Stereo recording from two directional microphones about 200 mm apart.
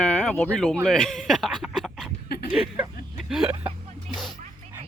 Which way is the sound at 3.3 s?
5° right (ahead or behind).